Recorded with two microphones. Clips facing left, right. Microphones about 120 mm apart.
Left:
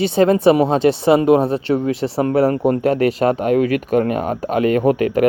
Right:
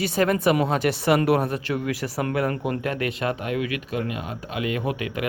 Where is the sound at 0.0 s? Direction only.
25° left (ahead or behind).